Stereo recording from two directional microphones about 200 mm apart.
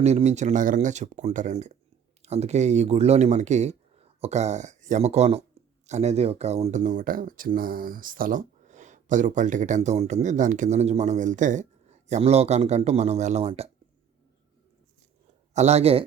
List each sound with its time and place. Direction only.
0.0 s speech: 35° right (ahead or behind)
15.5 s speech: 35° right (ahead or behind)